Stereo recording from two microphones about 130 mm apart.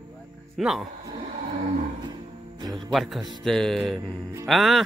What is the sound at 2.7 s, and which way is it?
Speech, centre (ahead or behind).